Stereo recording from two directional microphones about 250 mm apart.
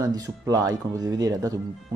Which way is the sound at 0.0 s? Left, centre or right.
Centre.